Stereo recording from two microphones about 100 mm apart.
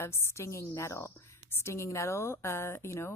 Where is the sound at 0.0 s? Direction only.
25° left (ahead or behind).